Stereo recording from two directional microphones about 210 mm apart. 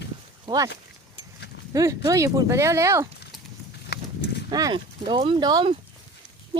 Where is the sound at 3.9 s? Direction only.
55° left (ahead or behind).